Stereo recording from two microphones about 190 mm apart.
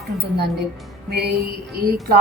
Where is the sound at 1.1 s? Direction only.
60° right (ahead or behind).